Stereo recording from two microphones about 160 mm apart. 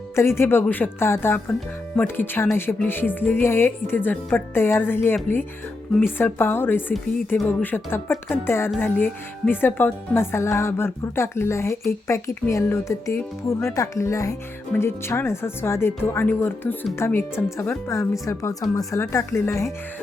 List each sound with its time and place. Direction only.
0.2 s speech: 15° left (ahead or behind)
6.1 s speech: 15° left (ahead or behind)